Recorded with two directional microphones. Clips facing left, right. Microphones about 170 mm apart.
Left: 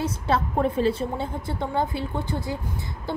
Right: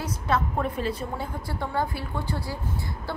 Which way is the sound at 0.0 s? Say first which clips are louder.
Left 2 dB; 30° left (ahead or behind).